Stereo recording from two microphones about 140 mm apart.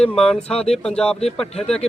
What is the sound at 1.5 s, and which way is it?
Speech, 50° left (ahead or behind).